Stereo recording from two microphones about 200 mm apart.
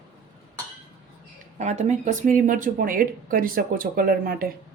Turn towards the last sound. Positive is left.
turn(degrees=-50)  # may be behind; listen again after turning